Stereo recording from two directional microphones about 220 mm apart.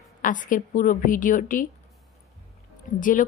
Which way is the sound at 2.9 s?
35° left (ahead or behind).